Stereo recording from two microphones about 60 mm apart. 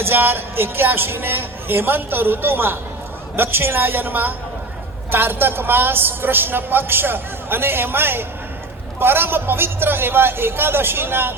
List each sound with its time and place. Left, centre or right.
0.0 s a woman's voice: right